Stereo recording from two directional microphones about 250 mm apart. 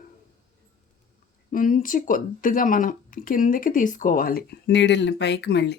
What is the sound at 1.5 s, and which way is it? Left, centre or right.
Speech, left.